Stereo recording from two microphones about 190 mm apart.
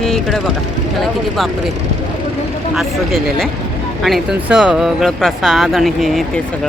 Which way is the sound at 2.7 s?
Centre (ahead or behind).